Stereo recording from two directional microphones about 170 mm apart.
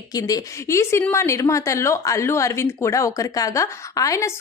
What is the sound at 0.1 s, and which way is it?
A woman's voice, 20° left (ahead or behind).